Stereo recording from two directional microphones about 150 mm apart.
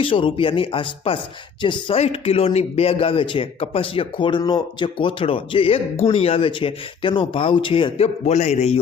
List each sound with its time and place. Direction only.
0.0 s speech: 35° left (ahead or behind)